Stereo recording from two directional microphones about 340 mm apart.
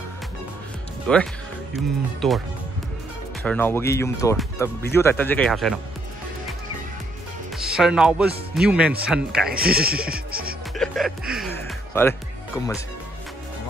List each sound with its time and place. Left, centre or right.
1.0 s speech: centre
3.4 s speech: centre
7.5 s speech: centre
9.5 s speech: right
10.8 s music: centre